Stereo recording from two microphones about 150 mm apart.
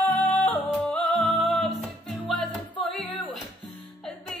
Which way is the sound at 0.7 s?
5° left (ahead or behind).